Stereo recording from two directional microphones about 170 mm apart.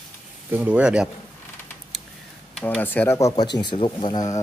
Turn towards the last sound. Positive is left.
turn(degrees=25)  # may be behind; listen again after turning